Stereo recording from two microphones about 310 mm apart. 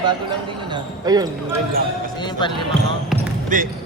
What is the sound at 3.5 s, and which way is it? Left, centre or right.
Speech, right.